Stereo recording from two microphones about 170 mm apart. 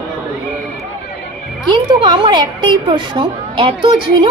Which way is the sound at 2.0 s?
25° right (ahead or behind).